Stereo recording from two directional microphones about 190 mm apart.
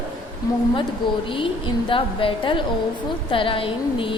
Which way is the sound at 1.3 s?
25° left (ahead or behind).